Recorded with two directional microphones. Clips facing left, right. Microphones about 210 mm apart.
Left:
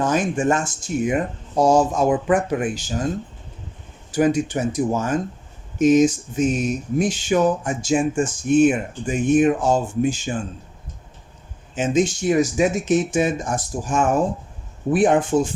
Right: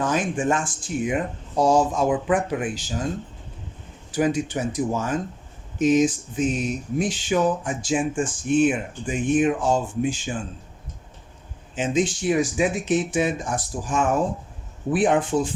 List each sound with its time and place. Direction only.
0.0 s speech: 45° left (ahead or behind)
4.1 s speech: 45° left (ahead or behind)
11.7 s speech: 45° left (ahead or behind)